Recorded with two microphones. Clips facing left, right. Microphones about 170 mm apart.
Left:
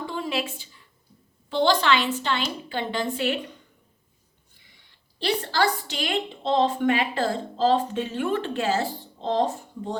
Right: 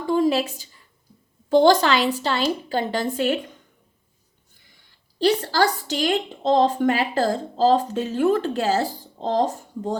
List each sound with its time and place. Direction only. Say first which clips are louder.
0.1 s a sound: right 13 dB; 40° right (ahead or behind)
1.5 s a woman's voice: right 6 dB; 45° right (ahead or behind)
5.2 s a woman's voice: right 4 dB; 40° right (ahead or behind)